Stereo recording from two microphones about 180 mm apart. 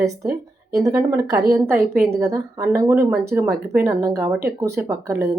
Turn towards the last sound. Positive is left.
turn(degrees=-15)  # may be behind; listen again after turning